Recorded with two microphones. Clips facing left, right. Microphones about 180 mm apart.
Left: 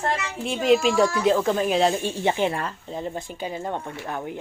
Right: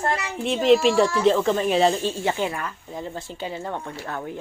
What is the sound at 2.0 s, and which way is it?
Speech, 20° left (ahead or behind).